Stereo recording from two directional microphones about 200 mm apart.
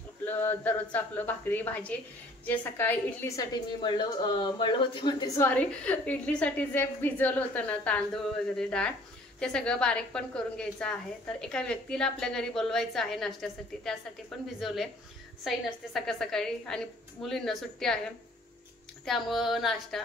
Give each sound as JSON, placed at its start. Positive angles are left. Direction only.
{"t": 0.2, "sound": "a woman's voice", "side_deg": 10}
{"t": 5.5, "sound": "a woman's voice", "side_deg": 5}
{"t": 19.0, "sound": "a woman's voice", "side_deg": 0}